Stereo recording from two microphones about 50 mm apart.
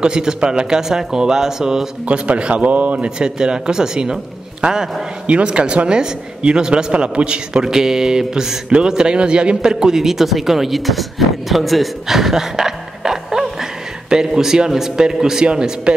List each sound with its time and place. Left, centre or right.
0.0 s speech: centre
2.0 s speech: right